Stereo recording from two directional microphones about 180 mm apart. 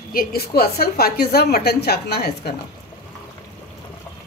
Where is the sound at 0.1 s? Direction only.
55° left (ahead or behind).